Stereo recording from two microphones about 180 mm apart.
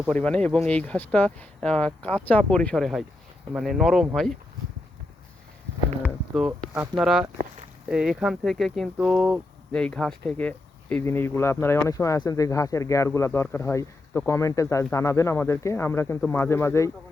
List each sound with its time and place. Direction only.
0.1 s speech: 5° left (ahead or behind)
6.0 s a sound: centre (ahead or behind)
7.0 s speech: centre (ahead or behind); by 16.9 s 15° left (ahead or behind)